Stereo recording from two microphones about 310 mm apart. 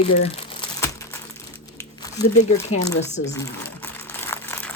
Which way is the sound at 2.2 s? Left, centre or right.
Left.